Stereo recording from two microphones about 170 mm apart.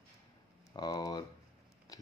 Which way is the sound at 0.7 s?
25° left (ahead or behind).